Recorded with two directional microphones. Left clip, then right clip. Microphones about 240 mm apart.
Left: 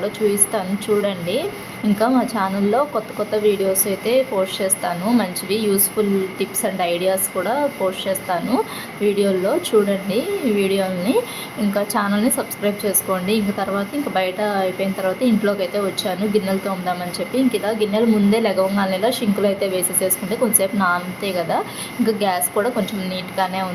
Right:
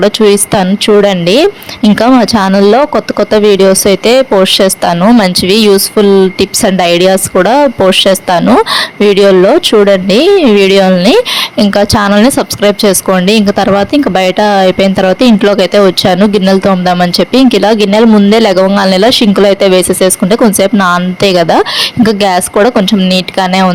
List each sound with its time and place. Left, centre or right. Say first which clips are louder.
0.0 s speech: right 14 dB; right